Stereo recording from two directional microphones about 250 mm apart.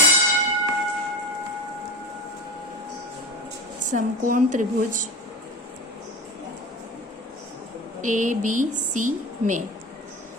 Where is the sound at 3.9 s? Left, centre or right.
Right.